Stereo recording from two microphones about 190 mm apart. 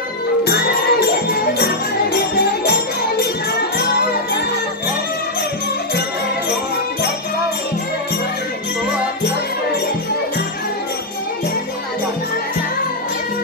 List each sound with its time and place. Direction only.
0.4 s music: 55° left (ahead or behind)